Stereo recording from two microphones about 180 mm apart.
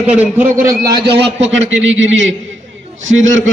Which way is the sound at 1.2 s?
35° right (ahead or behind).